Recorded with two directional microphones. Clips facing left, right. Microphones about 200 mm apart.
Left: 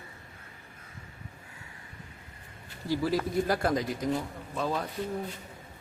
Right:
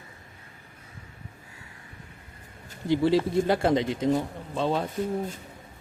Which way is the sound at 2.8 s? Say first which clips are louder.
Right 6 dB; 25° right (ahead or behind).